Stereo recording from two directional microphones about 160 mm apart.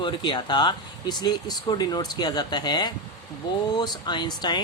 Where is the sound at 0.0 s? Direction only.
30° left (ahead or behind).